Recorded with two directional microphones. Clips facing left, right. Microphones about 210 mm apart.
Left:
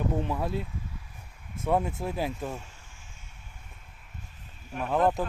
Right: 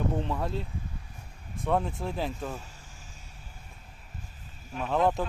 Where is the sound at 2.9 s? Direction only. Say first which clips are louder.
Right 3 dB; 35° right (ahead or behind).